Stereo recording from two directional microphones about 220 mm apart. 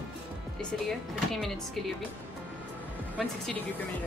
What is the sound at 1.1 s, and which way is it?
Speech, centre (ahead or behind).